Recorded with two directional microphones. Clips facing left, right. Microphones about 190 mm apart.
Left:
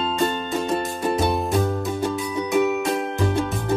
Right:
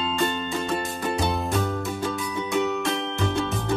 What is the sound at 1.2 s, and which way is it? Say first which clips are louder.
Music: left 3 dB; centre (ahead or behind).